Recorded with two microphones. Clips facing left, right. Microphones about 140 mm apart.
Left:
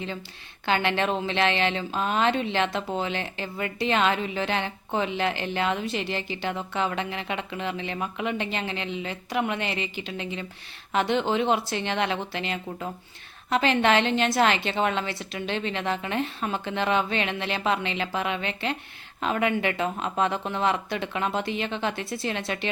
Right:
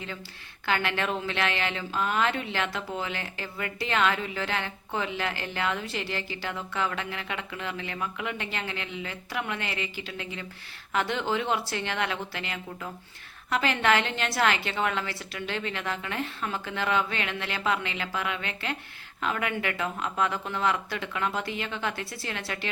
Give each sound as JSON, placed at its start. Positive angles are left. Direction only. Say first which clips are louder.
{"t": 0.6, "sound": "speech", "louder": "left 4 dB", "side_deg": 25}